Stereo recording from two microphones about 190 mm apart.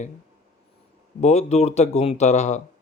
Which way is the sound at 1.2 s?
35° left (ahead or behind).